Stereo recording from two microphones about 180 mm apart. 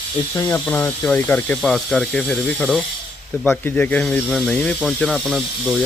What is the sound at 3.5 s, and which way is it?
Speech, 10° left (ahead or behind).